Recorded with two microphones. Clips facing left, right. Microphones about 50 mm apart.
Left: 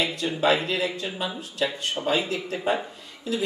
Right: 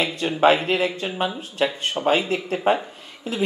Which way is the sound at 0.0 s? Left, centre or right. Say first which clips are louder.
Right 5 dB; right.